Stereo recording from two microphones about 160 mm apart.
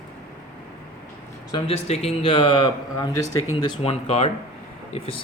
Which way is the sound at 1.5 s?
40° left (ahead or behind).